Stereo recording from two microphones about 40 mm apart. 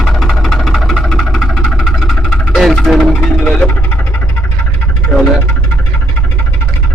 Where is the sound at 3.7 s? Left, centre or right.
Left.